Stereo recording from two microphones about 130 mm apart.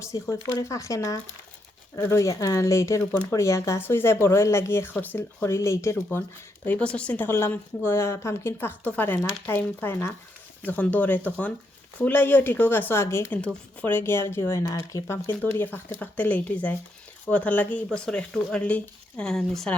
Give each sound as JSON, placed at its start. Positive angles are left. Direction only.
{"t": 0.0, "sound": "speech", "side_deg": 25}
{"t": 6.7, "sound": "a woman's voice", "side_deg": 10}